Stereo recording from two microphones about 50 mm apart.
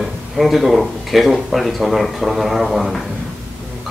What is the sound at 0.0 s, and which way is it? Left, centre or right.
A man's voice, centre.